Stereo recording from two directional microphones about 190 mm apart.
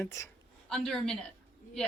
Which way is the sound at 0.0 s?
15° left (ahead or behind).